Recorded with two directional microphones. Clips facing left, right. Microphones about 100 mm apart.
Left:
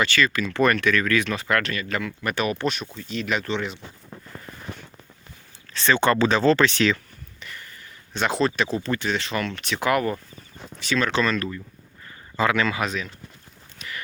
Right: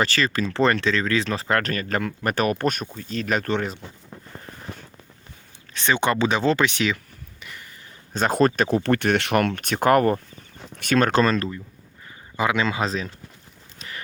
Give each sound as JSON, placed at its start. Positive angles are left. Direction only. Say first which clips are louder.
{"t": 0.0, "sound": "speech", "louder": "even", "side_deg": -35}
{"t": 5.7, "sound": "speech", "louder": "left 2 dB", "side_deg": -15}
{"t": 8.1, "sound": "speech", "louder": "right 3 dB", "side_deg": -45}
{"t": 12.0, "sound": "speech", "louder": "left 1 dB", "side_deg": -15}
{"t": 13.7, "sound": "a sound", "louder": "left 1 dB", "side_deg": -35}